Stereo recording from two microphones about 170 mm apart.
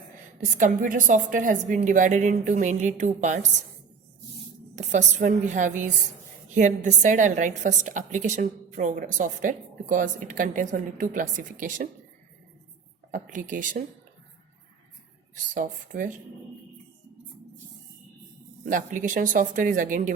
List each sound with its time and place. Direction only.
0.5 s a woman's voice: 50° right (ahead or behind)
4.7 s a woman's voice: 45° right (ahead or behind)
13.1 s a woman's voice: 50° right (ahead or behind)
15.5 s a woman's voice: 50° right (ahead or behind)
18.6 s a woman's voice: 50° right (ahead or behind)